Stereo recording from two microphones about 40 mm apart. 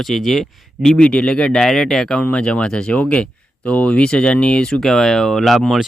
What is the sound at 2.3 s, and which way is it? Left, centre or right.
Speech, left.